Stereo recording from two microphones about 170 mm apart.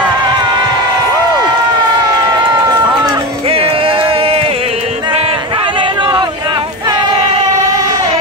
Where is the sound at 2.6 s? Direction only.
25° right (ahead or behind).